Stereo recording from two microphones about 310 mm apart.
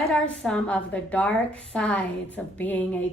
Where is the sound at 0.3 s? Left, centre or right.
Centre.